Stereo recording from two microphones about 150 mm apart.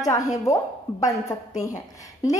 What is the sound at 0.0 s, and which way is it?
Speech, 20° left (ahead or behind).